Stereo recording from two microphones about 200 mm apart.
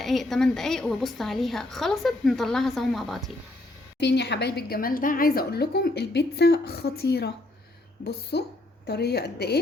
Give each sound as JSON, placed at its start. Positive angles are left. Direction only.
{"t": 0.0, "sound": "a woman's voice", "side_deg": 0}
{"t": 4.0, "sound": "a woman's voice", "side_deg": 60}